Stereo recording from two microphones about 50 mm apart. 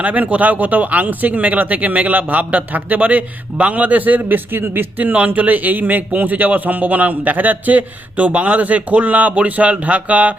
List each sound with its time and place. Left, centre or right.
0.0 s speech: right
4.9 s speech: right